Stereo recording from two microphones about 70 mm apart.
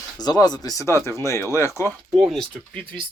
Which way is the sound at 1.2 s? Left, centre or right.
Left.